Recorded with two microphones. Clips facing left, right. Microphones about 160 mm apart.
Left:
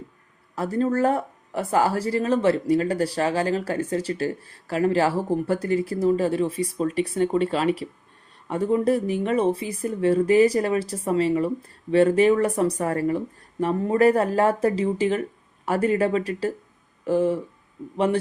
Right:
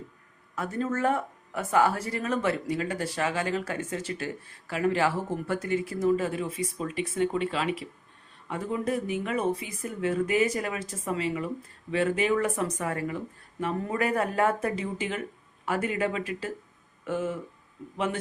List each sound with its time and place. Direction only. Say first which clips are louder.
0.5 s speech: left 7 dB; 35° left (ahead or behind)